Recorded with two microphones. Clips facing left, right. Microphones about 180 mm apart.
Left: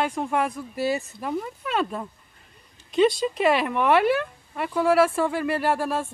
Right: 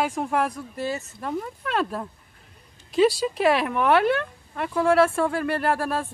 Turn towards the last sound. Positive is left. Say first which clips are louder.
# even
turn(degrees=0)  # may be behind; listen again after turning